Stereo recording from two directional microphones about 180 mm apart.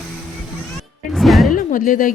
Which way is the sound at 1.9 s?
50° left (ahead or behind).